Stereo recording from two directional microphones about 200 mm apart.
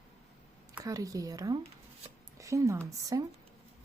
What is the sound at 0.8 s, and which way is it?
Speech, 15° right (ahead or behind).